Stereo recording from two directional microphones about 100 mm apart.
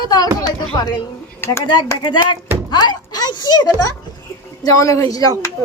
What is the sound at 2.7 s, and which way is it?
Speech, 45° left (ahead or behind).